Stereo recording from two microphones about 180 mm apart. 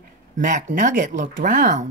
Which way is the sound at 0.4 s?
45° right (ahead or behind).